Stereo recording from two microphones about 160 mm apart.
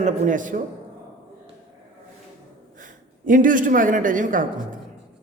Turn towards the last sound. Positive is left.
turn(degrees=-55)  # may be behind; listen again after turning